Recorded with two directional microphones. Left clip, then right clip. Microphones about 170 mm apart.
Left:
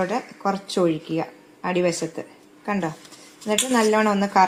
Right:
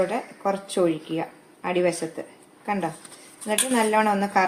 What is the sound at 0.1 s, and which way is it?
A woman's voice, 35° left (ahead or behind).